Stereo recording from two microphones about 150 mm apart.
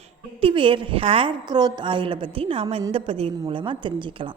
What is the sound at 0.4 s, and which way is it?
A woman's voice, 35° right (ahead or behind).